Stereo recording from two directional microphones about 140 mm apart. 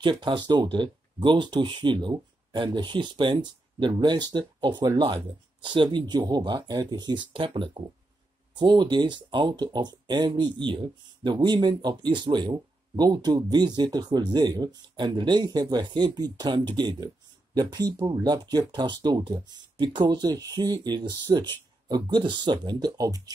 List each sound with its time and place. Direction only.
0.0 s speech: 35° right (ahead or behind)